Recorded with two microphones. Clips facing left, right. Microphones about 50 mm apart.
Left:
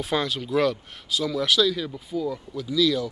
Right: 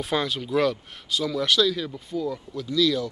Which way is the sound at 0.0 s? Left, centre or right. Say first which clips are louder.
Even; centre.